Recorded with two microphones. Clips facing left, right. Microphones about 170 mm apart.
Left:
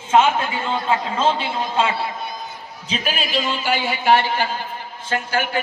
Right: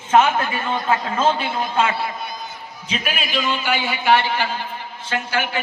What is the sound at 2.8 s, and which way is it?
A man's voice, 35° left (ahead or behind).